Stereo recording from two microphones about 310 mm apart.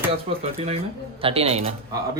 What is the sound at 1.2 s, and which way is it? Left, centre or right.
Speech, centre.